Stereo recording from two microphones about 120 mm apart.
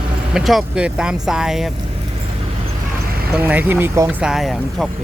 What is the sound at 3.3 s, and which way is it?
Speech, 15° right (ahead or behind).